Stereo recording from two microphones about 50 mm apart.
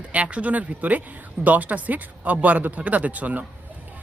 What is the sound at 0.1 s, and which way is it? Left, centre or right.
Speech, right.